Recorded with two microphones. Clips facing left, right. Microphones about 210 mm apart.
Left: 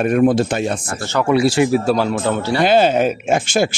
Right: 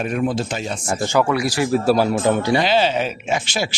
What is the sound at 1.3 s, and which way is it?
Speech, 25° left (ahead or behind).